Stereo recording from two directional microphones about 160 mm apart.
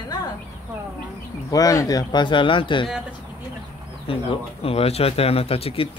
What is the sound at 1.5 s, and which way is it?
Speech, 20° left (ahead or behind).